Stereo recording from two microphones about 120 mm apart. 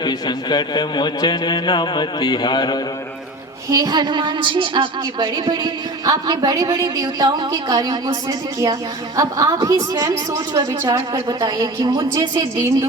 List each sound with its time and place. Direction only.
0.0 s a man's voice: 35° left (ahead or behind)
3.7 s a woman's voice: 35° right (ahead or behind)